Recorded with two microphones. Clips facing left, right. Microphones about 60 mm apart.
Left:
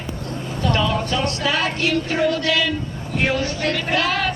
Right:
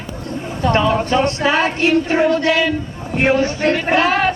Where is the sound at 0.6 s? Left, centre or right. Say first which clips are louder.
Right 5 dB; right.